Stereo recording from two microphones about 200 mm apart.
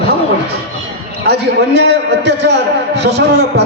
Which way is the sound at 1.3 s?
55° right (ahead or behind).